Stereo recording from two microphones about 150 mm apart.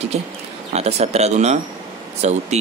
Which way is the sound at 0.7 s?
45° right (ahead or behind).